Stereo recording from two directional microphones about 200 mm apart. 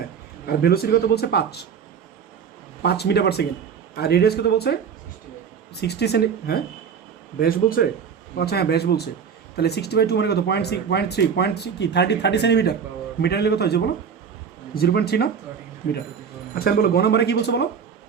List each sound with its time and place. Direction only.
0.4 s speech: 50° left (ahead or behind)
2.8 s speech: 55° left (ahead or behind)
16.6 s speech: 50° left (ahead or behind)